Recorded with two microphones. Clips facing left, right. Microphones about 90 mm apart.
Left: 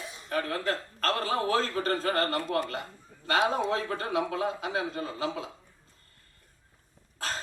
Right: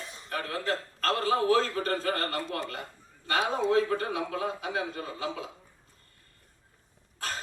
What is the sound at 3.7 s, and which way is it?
A man's voice, 30° left (ahead or behind).